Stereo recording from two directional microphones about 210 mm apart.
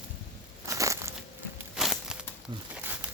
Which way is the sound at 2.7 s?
10° right (ahead or behind).